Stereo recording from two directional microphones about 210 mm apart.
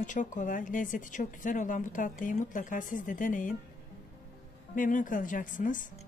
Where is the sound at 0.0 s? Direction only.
35° left (ahead or behind).